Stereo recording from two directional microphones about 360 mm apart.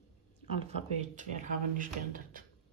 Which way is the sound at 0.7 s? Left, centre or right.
Centre.